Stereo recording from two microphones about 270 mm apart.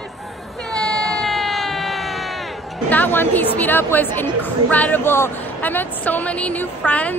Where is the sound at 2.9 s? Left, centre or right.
Centre.